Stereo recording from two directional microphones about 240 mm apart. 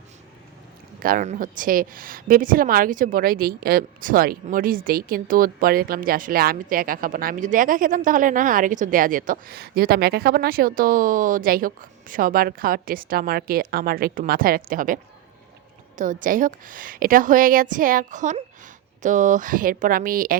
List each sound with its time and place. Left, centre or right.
0.9 s a woman's voice: right
16.0 s a woman's voice: right